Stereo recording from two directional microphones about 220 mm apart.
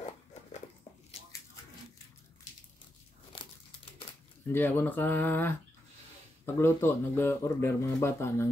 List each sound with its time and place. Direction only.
3.3 s crumpling: 25° left (ahead or behind)
4.5 s speech: 10° left (ahead or behind)